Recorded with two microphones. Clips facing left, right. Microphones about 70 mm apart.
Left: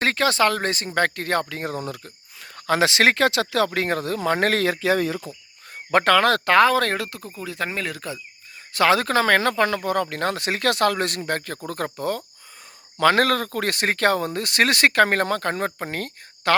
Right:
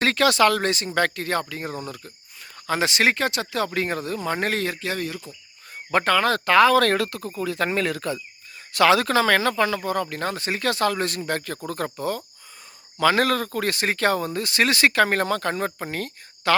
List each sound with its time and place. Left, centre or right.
0.0 s speech: left
3.7 s speech: left
5.9 s speech: left
6.7 s speech: left
8.7 s speech: left
11.3 s speech: left